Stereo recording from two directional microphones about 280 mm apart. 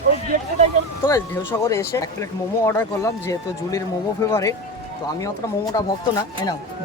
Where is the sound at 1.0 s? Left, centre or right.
Centre.